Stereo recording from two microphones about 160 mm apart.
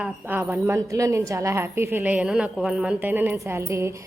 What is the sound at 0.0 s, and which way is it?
A woman's voice, 10° right (ahead or behind).